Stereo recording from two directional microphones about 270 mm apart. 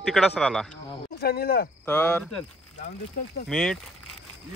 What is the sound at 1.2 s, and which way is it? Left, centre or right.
Speech, left.